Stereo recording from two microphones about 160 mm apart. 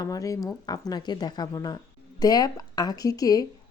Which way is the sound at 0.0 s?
20° left (ahead or behind).